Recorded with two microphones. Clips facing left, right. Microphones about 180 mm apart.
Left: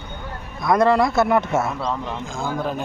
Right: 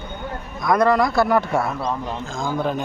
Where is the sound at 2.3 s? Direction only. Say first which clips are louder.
Right 2 dB; 5° left (ahead or behind).